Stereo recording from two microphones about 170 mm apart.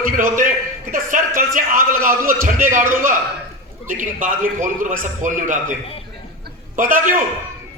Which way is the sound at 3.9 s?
50° right (ahead or behind).